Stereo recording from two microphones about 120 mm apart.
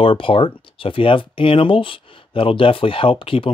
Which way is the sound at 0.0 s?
45° left (ahead or behind).